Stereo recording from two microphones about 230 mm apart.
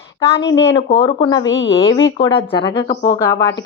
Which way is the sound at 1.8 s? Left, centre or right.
Centre.